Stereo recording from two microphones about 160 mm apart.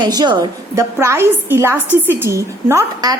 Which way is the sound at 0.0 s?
25° right (ahead or behind).